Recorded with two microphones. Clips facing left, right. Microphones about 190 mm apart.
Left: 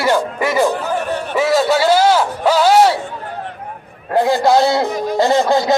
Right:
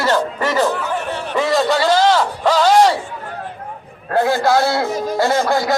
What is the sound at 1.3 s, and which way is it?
A man's voice, 5° left (ahead or behind).